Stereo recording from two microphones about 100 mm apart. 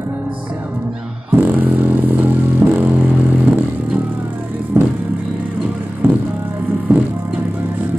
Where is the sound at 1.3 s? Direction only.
20° right (ahead or behind).